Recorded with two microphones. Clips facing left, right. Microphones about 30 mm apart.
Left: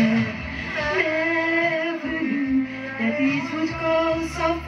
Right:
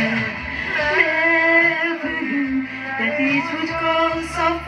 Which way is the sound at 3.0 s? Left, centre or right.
Right.